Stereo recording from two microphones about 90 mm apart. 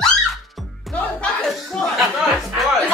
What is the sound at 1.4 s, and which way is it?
Chuckle, 5° left (ahead or behind).